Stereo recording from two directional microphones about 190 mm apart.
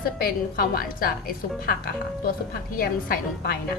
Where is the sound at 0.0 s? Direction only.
50° left (ahead or behind).